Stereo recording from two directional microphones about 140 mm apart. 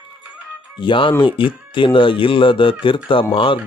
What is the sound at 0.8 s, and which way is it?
Speech, 35° left (ahead or behind).